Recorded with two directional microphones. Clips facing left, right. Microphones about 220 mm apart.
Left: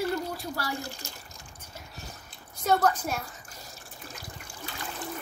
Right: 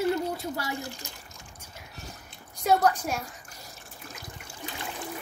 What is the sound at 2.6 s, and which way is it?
Speech, 10° right (ahead or behind).